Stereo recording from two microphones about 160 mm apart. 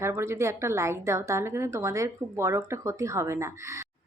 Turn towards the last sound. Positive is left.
turn(degrees=-20)  # may be behind; listen again after turning